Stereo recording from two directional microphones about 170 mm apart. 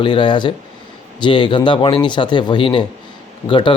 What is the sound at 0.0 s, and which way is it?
Speech, 30° left (ahead or behind).